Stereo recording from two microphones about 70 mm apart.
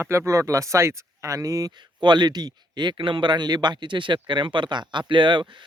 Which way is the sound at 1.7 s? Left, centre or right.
Right.